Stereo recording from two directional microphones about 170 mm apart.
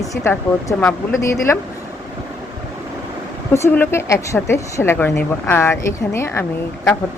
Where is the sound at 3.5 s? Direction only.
15° left (ahead or behind).